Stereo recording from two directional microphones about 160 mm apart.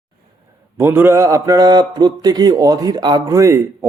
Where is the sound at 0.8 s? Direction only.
15° right (ahead or behind).